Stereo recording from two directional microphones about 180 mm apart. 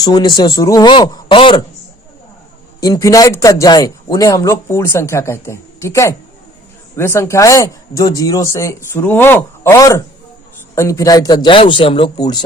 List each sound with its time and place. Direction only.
0.0 s speech: 25° left (ahead or behind)
2.8 s a man's voice: 20° left (ahead or behind)